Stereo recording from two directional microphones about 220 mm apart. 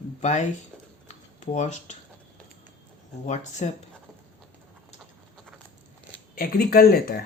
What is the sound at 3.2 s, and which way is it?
Speech, 30° left (ahead or behind).